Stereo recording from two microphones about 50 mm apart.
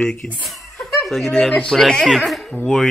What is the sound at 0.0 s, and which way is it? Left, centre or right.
Speech, centre.